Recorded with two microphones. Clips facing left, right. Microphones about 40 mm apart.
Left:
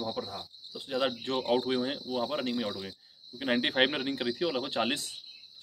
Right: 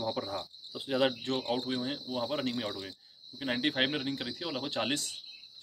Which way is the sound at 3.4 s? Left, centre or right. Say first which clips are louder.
Left 3 dB; centre.